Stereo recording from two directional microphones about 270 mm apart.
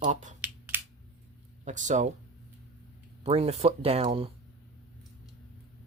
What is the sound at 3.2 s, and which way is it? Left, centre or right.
Speech, right.